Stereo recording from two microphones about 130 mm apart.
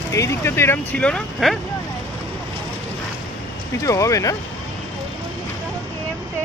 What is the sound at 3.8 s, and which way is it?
Speech, 25° left (ahead or behind).